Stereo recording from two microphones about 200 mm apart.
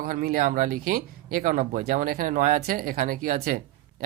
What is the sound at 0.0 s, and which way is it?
Speech, 45° right (ahead or behind).